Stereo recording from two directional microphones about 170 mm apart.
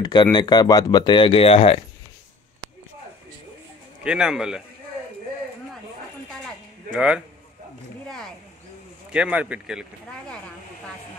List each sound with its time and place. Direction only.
0.0 s speech: 25° left (ahead or behind)
4.0 s speech: 5° right (ahead or behind)
6.9 s speech: 5° right (ahead or behind)
9.1 s speech: 5° right (ahead or behind)